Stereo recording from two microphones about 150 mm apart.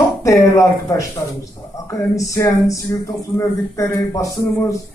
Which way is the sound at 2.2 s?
20° left (ahead or behind).